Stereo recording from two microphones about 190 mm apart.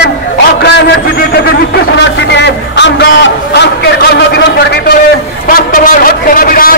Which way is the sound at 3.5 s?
55° left (ahead or behind).